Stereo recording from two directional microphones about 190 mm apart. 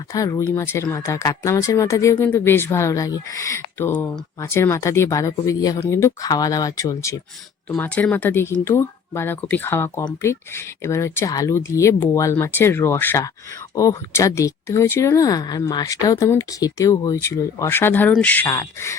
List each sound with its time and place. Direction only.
0.1 s speech: 20° left (ahead or behind)